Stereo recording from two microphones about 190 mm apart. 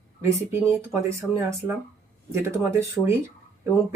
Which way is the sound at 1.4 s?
15° right (ahead or behind).